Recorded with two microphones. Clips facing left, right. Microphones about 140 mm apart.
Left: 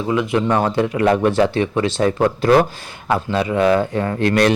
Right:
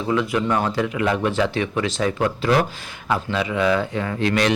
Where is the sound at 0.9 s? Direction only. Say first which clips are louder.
Left 7 dB; 45° left (ahead or behind).